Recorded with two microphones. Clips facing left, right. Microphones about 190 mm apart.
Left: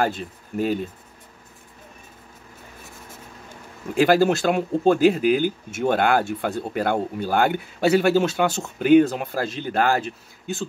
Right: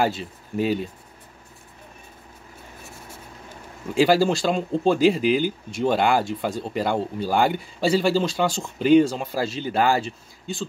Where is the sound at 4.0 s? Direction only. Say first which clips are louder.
Left 1 dB; 55° left (ahead or behind).